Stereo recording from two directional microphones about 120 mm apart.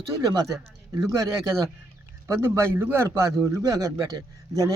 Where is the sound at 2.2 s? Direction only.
20° right (ahead or behind).